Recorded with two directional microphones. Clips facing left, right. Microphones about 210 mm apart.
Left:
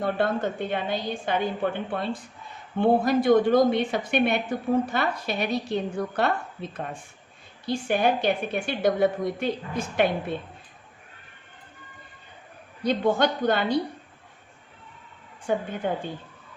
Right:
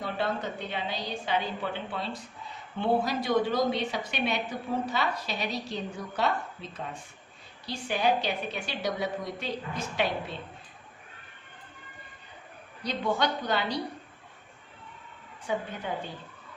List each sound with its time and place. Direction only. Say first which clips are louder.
0.0 s a woman's voice: left 6 dB; 55° left (ahead or behind)
12.8 s a woman's voice: left 6 dB; 50° left (ahead or behind)
15.5 s a woman's voice: left 6 dB; 50° left (ahead or behind)